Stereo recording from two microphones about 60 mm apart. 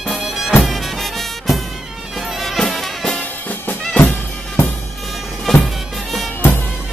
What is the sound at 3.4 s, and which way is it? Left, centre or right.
Music, left.